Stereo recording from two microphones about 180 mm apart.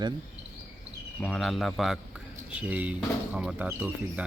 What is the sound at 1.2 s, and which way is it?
Speech, 5° left (ahead or behind).